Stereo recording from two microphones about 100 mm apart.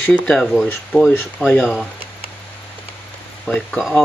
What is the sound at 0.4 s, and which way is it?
Speech, centre (ahead or behind).